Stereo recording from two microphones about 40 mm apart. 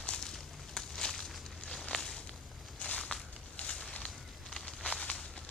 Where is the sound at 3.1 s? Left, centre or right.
Left.